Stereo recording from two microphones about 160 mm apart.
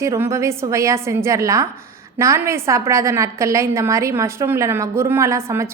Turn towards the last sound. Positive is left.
turn(degrees=-15)  # may be behind; listen again after turning